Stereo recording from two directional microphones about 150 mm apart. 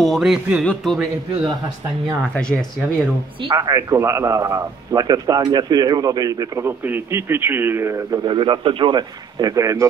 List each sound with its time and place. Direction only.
0.0 s a man's voice: centre (ahead or behind)
3.4 s a man's voice: 25° right (ahead or behind)